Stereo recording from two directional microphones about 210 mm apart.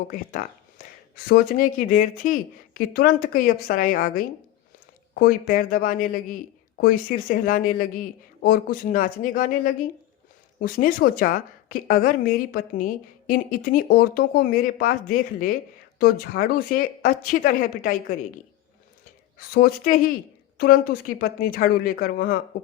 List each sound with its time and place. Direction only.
0.3 s a woman's voice: 40° left (ahead or behind)
19.4 s a woman's voice: 45° left (ahead or behind)